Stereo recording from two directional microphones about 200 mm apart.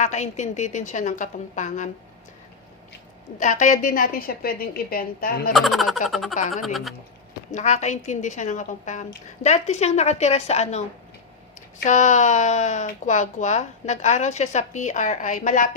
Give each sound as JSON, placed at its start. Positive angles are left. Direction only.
{"t": 0.0, "sound": "speech", "side_deg": 35}
{"t": 3.4, "sound": "a woman's voice", "side_deg": 40}
{"t": 5.5, "sound": "speech", "side_deg": 0}
{"t": 7.5, "sound": "speech", "side_deg": 35}